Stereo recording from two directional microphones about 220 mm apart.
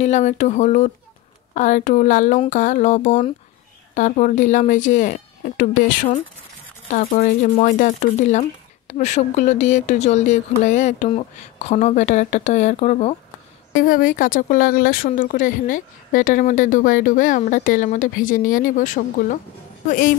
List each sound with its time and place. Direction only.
0.0 s speech: 30° left (ahead or behind)